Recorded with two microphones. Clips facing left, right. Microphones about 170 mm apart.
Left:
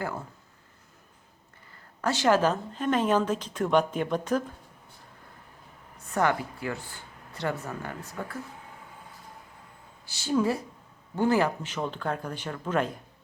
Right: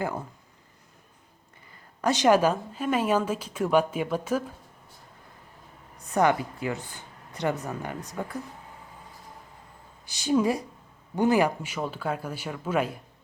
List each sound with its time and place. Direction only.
2.0 s a woman's voice: 15° right (ahead or behind)
6.1 s a woman's voice: 15° right (ahead or behind)
10.1 s a woman's voice: 15° right (ahead or behind)